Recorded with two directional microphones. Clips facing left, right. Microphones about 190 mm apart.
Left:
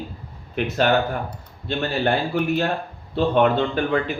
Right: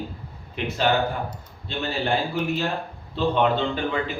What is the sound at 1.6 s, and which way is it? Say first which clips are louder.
A man's voice: left 5 dB; 60° left (ahead or behind).